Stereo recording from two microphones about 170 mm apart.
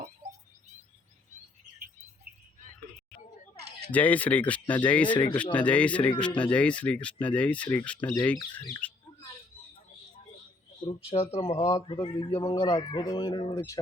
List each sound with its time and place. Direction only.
3.9 s speech: 10° left (ahead or behind)
8.8 s rodents: 10° left (ahead or behind)
11.1 s speech: 35° left (ahead or behind)
11.4 s speech: 20° left (ahead or behind)